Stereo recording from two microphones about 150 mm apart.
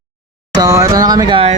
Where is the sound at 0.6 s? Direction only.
20° right (ahead or behind).